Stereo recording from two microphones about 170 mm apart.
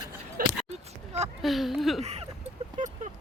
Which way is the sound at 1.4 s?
Centre (ahead or behind).